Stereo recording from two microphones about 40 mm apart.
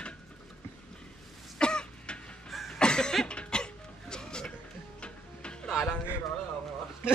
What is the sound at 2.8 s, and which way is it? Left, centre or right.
Cough, left.